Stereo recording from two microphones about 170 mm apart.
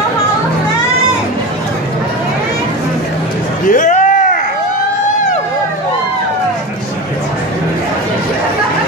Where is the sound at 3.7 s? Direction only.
50° left (ahead or behind).